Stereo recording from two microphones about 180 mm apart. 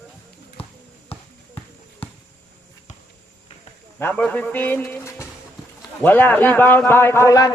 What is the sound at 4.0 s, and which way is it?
A man's voice, 10° left (ahead or behind).